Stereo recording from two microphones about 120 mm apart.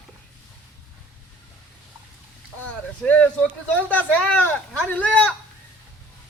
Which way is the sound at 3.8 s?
10° left (ahead or behind).